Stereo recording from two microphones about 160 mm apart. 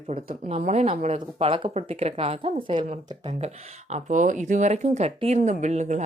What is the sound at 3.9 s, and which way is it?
Speech, 50° right (ahead or behind).